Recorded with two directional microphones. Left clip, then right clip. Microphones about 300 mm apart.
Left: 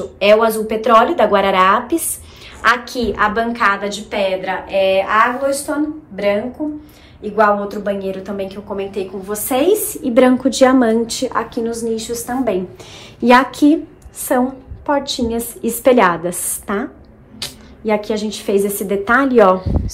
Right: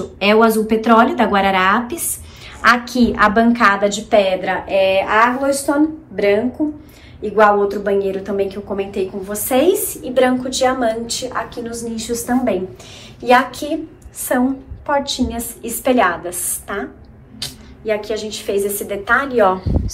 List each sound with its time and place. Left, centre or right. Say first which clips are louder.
0.2 s a woman's voice: left 1 dB; centre
13.2 s a woman's voice: left 3 dB; left